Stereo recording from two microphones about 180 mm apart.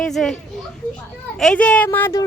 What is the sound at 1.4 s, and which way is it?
Speech, 5° left (ahead or behind).